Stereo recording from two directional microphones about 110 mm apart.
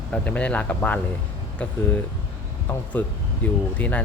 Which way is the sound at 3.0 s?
15° left (ahead or behind).